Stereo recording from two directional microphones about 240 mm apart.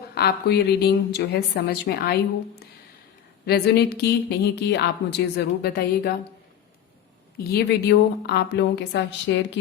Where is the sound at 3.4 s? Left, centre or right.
Left.